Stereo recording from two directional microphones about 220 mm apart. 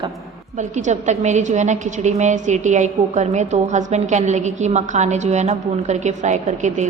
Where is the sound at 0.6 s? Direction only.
35° right (ahead or behind).